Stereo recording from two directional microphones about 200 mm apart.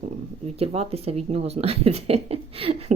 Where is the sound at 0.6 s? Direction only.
30° right (ahead or behind).